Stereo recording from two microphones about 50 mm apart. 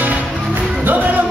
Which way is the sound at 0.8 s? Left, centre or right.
Right.